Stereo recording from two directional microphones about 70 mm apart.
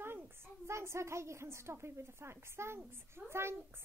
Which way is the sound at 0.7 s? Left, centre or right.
Right.